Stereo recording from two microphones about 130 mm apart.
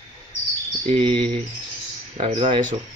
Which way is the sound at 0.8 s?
45° right (ahead or behind).